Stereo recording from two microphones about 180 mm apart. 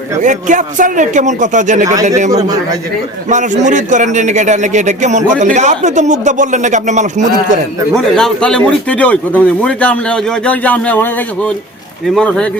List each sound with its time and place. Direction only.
0.2 s a man's voice: 45° right (ahead or behind)
2.3 s a man's voice: 20° right (ahead or behind)
3.2 s a man's voice: 45° right (ahead or behind)
7.9 s a man's voice: 5° left (ahead or behind)